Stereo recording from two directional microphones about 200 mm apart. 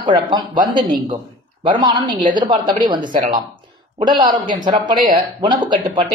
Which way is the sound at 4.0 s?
20° right (ahead or behind).